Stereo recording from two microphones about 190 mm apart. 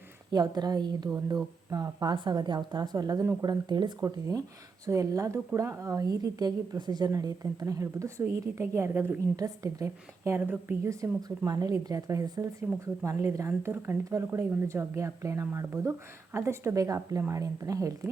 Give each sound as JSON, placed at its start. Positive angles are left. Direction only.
{"t": 0.3, "sound": "a woman's voice", "side_deg": -20}